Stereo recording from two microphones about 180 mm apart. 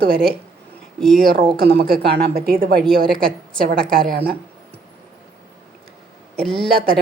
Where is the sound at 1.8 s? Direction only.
60° right (ahead or behind).